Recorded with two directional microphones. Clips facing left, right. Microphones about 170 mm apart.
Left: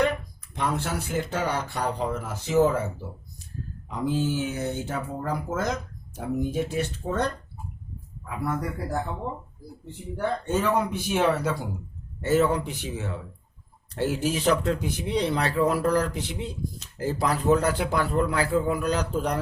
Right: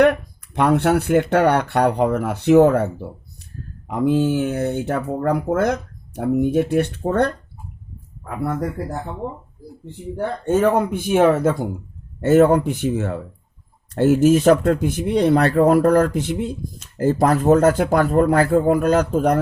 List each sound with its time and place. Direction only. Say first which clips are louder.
0.0 s speech: right 10 dB; 65° right (ahead or behind)
10.2 s speech: right 7 dB; 50° right (ahead or behind)